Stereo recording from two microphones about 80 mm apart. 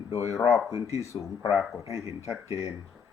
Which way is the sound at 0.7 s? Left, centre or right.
Right.